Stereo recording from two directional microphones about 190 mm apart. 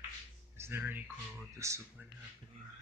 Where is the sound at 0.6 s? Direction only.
10° right (ahead or behind).